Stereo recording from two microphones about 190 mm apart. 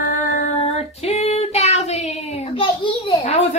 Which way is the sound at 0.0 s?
45° left (ahead or behind).